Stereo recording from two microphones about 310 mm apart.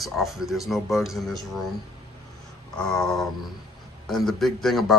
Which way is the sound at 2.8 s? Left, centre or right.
Centre.